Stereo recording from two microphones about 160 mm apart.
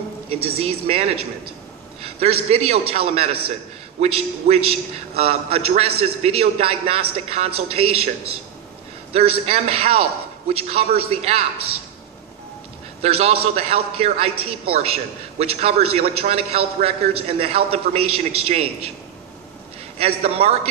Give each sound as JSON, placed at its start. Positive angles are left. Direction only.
{"t": 0.6, "sound": "a man's voice", "side_deg": -35}
{"t": 13.0, "sound": "a man's voice", "side_deg": -40}
{"t": 20.2, "sound": "a man's voice", "side_deg": -35}